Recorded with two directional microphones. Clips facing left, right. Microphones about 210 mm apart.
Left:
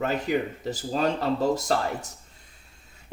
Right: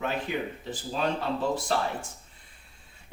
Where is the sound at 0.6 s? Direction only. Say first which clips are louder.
Left 4 dB; 40° left (ahead or behind).